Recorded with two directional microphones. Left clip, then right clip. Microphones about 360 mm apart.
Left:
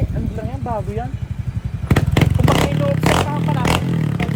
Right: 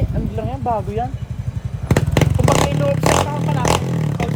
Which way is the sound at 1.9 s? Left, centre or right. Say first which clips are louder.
Even; right.